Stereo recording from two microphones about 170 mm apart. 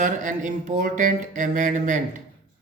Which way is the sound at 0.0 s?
50° right (ahead or behind).